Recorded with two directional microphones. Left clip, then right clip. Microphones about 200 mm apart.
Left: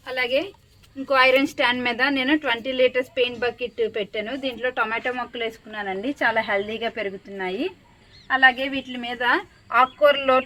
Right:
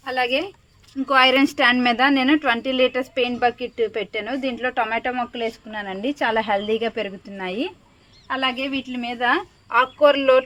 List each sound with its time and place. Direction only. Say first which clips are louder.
0.0 s a woman's voice: right 2 dB; 30° right (ahead or behind)
8.3 s a woman's voice: left 5 dB; 30° right (ahead or behind)